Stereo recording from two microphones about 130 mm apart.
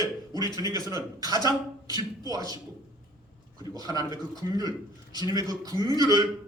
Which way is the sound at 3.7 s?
30° right (ahead or behind).